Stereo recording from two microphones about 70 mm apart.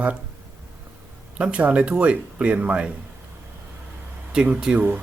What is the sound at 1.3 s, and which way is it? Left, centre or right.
Speech, centre.